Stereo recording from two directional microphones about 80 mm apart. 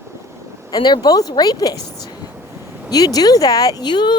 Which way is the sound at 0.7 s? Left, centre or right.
Left.